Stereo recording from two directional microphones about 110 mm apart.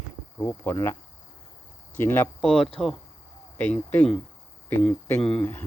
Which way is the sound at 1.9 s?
20° left (ahead or behind).